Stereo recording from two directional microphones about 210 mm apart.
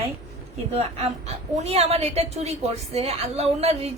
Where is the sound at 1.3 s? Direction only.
30° right (ahead or behind).